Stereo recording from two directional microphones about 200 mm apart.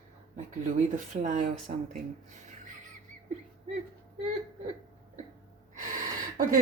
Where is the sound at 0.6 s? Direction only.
35° right (ahead or behind).